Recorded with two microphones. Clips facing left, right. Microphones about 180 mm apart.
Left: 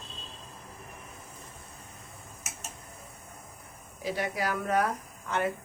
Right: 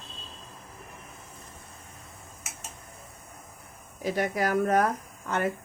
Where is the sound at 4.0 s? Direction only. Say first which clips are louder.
Right 4 dB; 50° right (ahead or behind).